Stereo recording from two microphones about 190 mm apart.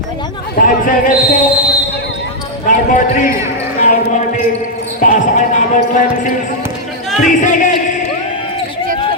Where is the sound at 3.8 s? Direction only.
40° left (ahead or behind).